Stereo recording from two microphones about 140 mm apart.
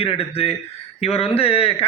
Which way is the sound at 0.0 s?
45° left (ahead or behind).